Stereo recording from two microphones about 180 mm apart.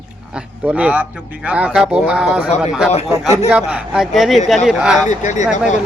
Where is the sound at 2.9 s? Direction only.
35° left (ahead or behind).